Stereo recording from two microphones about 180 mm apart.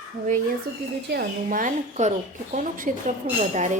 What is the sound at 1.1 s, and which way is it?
A woman's voice, 50° right (ahead or behind).